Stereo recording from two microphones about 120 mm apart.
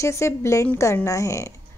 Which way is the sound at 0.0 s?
25° left (ahead or behind).